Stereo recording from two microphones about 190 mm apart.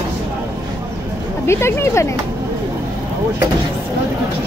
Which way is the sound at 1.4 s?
15° left (ahead or behind).